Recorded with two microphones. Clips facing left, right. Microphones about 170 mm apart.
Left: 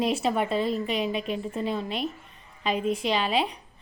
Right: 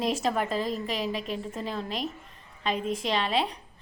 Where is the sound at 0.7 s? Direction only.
35° right (ahead or behind).